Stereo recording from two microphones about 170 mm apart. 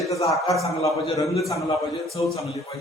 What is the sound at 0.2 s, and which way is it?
A man's voice, 35° left (ahead or behind).